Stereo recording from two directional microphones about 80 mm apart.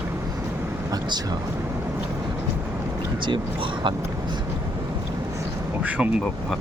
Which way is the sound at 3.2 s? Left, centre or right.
Right.